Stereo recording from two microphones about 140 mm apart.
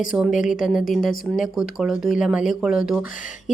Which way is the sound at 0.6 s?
5° right (ahead or behind).